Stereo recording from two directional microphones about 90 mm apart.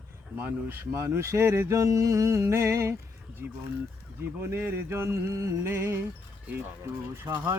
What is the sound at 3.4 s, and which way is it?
Speech, 20° right (ahead or behind).